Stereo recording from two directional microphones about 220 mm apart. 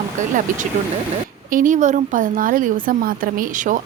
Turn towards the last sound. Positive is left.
turn(degrees=-35)  # may be behind; listen again after turning